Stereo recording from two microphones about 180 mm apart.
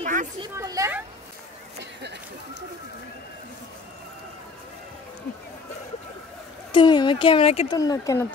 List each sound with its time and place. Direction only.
0.0 s a sound: 45° right (ahead or behind)
0.4 s speech: 20° right (ahead or behind)
1.8 s speech: 70° right (ahead or behind)
6.7 s speech: 25° left (ahead or behind)
7.7 s speech: 20° left (ahead or behind)